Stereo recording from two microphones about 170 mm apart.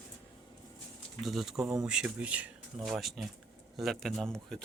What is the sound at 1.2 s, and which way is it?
Speech, centre (ahead or behind).